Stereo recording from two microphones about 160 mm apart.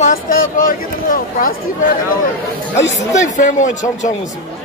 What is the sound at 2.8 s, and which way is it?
Speech, 45° left (ahead or behind).